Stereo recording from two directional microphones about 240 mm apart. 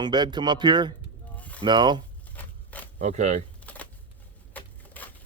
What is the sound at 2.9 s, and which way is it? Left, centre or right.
Speech, right.